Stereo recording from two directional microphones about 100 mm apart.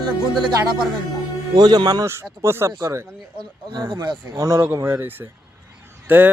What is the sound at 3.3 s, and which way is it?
Speech, 45° right (ahead or behind).